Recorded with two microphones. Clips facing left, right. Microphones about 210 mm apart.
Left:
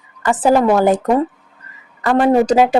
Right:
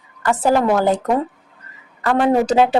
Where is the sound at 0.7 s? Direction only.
20° left (ahead or behind).